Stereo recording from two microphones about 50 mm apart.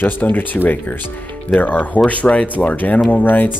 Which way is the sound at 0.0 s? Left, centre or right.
Left.